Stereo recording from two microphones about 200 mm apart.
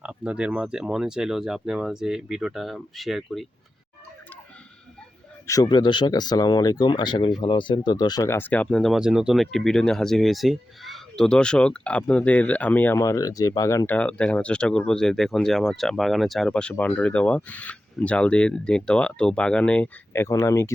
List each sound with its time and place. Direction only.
0.0 s speech: 5° right (ahead or behind)
5.5 s speech: 20° left (ahead or behind)